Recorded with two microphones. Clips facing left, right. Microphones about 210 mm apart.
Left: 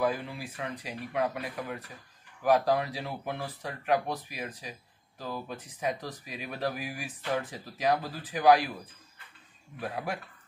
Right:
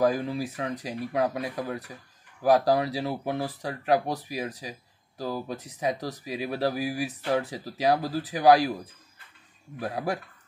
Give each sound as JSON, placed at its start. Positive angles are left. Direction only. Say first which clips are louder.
{"t": 0.0, "sound": "speech", "louder": "right 6 dB", "side_deg": -40}
{"t": 9.8, "sound": "speech", "louder": "right 5 dB", "side_deg": -35}